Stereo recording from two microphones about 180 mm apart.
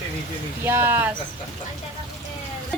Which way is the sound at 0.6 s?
10° right (ahead or behind).